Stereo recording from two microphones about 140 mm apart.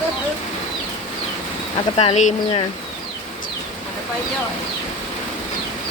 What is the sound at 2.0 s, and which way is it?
Speech, 55° left (ahead or behind).